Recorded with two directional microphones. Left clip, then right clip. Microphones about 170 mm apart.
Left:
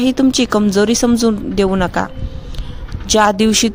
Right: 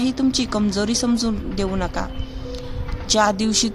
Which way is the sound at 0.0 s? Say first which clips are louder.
Left 7 dB; 50° left (ahead or behind).